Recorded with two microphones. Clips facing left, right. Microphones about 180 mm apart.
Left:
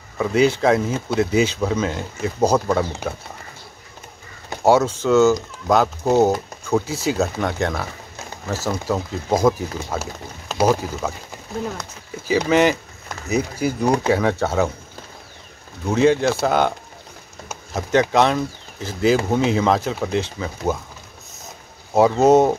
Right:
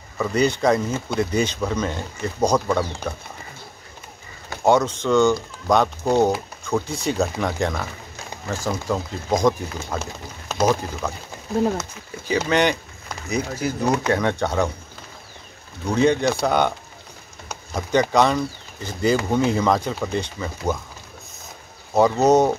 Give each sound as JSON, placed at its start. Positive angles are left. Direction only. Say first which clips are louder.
{"t": 0.2, "sound": "speech", "louder": "left 3 dB", "side_deg": 5}
{"t": 4.6, "sound": "speech", "louder": "left 2 dB", "side_deg": 10}
{"t": 11.7, "sound": "speech", "louder": "right 3 dB", "side_deg": 0}
{"t": 15.9, "sound": "speech", "louder": "left 2 dB", "side_deg": 0}
{"t": 17.5, "sound": "a sound", "louder": "left 2 dB", "side_deg": 5}
{"t": 18.1, "sound": "speech", "louder": "left 1 dB", "side_deg": 0}
{"t": 22.1, "sound": "speech", "louder": "left 3 dB", "side_deg": 25}